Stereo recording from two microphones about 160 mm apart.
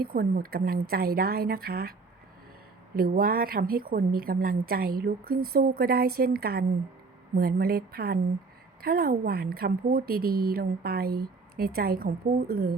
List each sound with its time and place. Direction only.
0.0 s a woman's voice: 70° right (ahead or behind)